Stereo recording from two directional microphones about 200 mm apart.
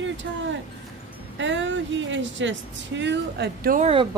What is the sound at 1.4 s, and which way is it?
Speech, 70° right (ahead or behind).